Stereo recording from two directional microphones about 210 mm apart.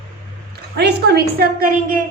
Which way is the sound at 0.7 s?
50° right (ahead or behind).